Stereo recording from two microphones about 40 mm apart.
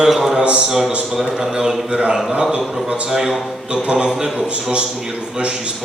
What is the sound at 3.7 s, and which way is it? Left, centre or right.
A man's voice, right.